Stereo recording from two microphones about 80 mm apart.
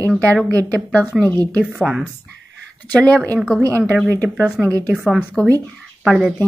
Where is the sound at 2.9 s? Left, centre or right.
Centre.